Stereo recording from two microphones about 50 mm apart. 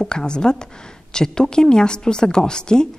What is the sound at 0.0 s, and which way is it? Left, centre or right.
Speech, centre.